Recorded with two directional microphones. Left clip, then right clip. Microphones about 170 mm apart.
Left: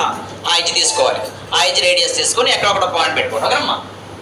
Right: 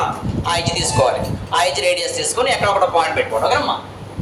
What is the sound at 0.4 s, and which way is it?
A man's voice, 30° right (ahead or behind).